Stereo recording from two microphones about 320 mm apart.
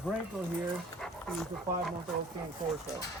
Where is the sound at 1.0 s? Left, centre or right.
Centre.